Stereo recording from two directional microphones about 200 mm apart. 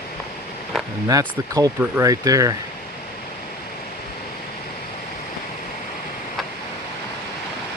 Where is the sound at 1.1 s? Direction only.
20° right (ahead or behind).